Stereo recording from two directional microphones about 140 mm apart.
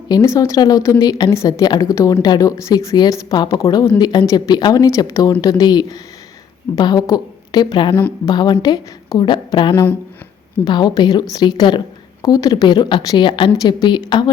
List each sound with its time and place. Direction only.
0.1 s a woman's voice: 25° left (ahead or behind)